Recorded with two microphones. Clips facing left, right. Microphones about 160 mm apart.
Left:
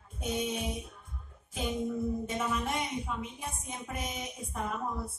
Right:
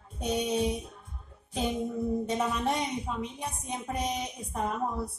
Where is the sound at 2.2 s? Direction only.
35° right (ahead or behind).